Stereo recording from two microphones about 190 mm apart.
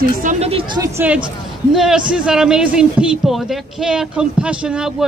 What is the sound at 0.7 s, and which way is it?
A man's voice, 15° right (ahead or behind).